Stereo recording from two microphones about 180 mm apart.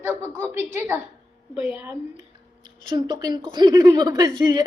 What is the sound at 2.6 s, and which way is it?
A woman's voice, 25° right (ahead or behind).